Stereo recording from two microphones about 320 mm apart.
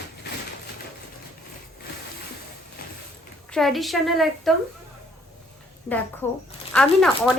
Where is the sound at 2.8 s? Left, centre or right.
Left.